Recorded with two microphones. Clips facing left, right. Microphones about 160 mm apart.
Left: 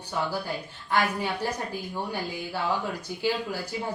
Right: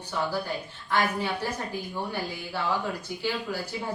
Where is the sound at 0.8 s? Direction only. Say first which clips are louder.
Even; 10° left (ahead or behind).